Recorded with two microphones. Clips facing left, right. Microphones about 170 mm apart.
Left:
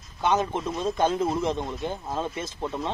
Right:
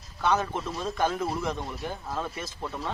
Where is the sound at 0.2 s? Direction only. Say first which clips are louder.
Left 2 dB; 20° left (ahead or behind).